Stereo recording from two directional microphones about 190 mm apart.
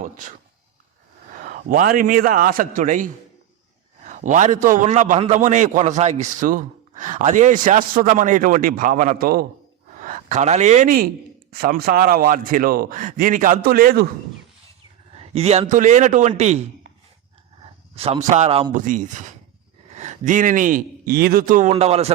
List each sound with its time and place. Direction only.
0.0 s a man's voice: 40° right (ahead or behind)
15.1 s a sound: 30° right (ahead or behind)
15.7 s a man's voice: 40° right (ahead or behind)
21.7 s a man's voice: 35° right (ahead or behind)